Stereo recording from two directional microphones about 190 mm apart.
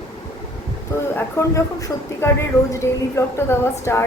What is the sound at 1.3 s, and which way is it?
A woman's voice, 15° left (ahead or behind).